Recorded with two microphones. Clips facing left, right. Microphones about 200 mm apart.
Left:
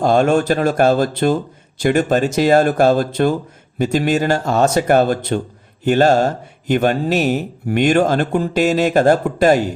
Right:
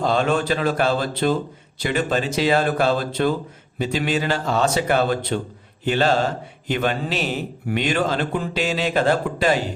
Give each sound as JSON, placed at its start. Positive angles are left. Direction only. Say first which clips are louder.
{"t": 0.0, "sound": "speech", "louder": "left 6 dB", "side_deg": 45}